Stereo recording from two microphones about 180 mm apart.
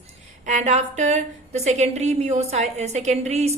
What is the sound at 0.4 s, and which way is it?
A woman's voice, 40° right (ahead or behind).